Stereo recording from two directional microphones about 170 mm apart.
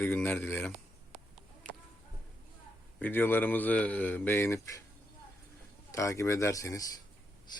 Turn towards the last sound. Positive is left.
turn(degrees=20)  # may be behind; listen again after turning